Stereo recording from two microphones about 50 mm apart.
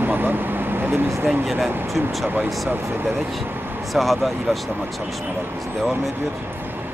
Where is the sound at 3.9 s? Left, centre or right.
Centre.